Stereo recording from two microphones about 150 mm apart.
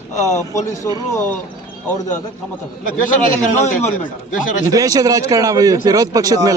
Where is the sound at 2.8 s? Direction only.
60° left (ahead or behind).